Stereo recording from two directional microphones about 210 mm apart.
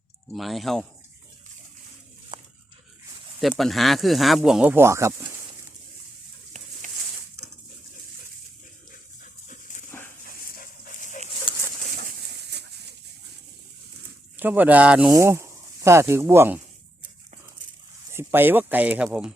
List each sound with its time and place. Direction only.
0.3 s speech: centre (ahead or behind)
3.6 s speech: centre (ahead or behind)
6.8 s bird: 35° right (ahead or behind)
9.5 s dog: 35° left (ahead or behind)
11.5 s a sound: 25° left (ahead or behind)
11.9 s bird: 50° right (ahead or behind)
14.3 s speech: 10° right (ahead or behind)
18.1 s speech: 10° right (ahead or behind)